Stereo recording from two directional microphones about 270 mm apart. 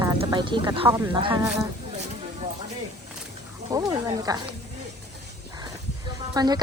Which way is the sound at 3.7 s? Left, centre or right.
Centre.